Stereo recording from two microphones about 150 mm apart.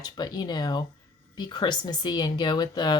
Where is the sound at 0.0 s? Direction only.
30° left (ahead or behind).